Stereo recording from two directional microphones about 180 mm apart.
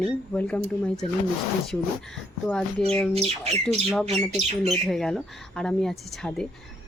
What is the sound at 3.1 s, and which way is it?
Speech, 35° right (ahead or behind).